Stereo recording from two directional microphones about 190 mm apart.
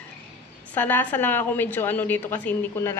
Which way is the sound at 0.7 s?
10° left (ahead or behind).